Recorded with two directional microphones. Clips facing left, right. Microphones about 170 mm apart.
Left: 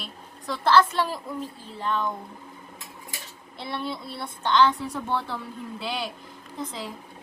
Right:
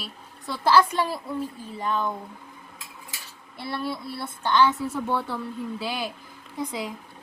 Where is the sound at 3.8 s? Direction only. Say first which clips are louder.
Right 2 dB; 20° left (ahead or behind).